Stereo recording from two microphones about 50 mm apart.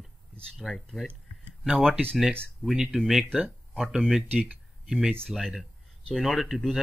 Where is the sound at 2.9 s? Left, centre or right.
Centre.